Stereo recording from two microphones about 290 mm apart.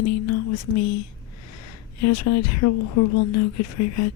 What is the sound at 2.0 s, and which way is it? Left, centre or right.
Speech, left.